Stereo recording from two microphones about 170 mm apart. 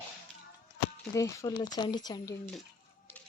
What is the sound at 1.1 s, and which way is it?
Speech, 20° left (ahead or behind).